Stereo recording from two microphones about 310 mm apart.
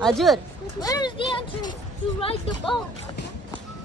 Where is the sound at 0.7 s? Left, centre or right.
Centre.